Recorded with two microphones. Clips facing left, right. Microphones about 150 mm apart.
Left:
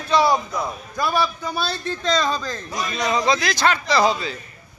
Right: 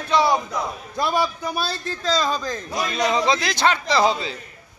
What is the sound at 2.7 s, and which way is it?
A man's voice, 25° right (ahead or behind).